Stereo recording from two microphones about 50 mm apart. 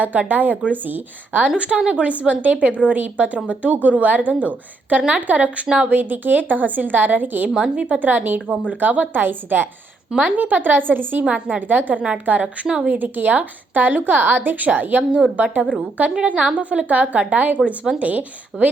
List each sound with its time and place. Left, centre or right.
0.0 s a woman's voice: right
1.5 s a woman's voice: right
5.6 s a woman's voice: centre
5.9 s a woman's voice: right
7.5 s a woman's voice: centre
7.9 s a woman's voice: right
10.1 s a woman's voice: right
11.2 s a woman's voice: right
11.7 s a woman's voice: right